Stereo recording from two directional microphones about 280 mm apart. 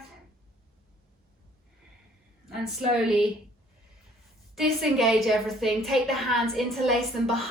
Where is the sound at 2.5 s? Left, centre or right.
Centre.